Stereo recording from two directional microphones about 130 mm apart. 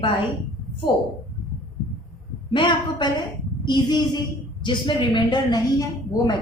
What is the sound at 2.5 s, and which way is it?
A woman's voice, 35° left (ahead or behind).